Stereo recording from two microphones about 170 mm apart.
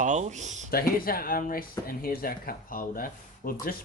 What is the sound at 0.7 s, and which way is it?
Speech, 60° left (ahead or behind).